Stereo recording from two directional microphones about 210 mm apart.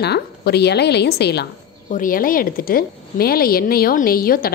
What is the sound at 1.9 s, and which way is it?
Speech, 40° left (ahead or behind).